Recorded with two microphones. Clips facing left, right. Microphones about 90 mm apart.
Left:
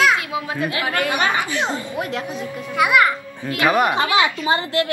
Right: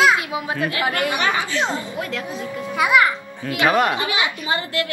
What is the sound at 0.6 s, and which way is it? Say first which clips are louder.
Speech: even; 25° left (ahead or behind).